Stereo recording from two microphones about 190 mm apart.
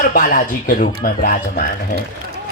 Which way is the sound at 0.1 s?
45° left (ahead or behind).